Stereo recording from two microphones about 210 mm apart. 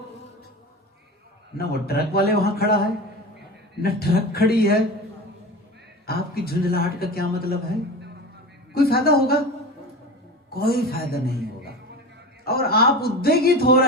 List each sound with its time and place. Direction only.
1.5 s speech: 45° left (ahead or behind)
3.8 s speech: 45° left (ahead or behind)
6.1 s speech: 45° left (ahead or behind)
8.7 s speech: 45° left (ahead or behind)
10.5 s a man's voice: 45° left (ahead or behind)